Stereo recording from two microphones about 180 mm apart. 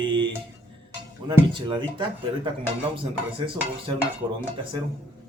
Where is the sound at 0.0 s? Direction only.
25° right (ahead or behind).